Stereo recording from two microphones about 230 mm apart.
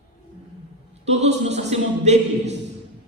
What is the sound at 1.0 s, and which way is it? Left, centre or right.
A man's voice, right.